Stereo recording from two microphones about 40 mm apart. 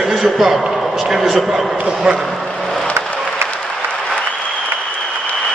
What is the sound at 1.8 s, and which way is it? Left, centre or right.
Speech, centre.